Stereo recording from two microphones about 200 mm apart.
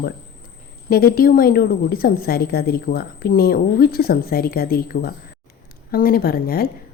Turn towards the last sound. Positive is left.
turn(degrees=50)  # may be behind; listen again after turning